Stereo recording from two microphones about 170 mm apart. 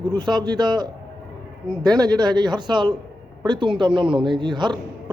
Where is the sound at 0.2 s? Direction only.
25° right (ahead or behind).